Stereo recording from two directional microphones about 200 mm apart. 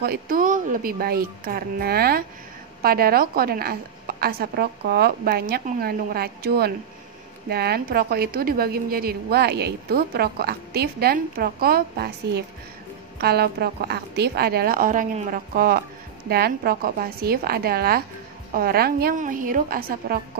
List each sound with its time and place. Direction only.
0.0 s a woman's voice: 50° right (ahead or behind)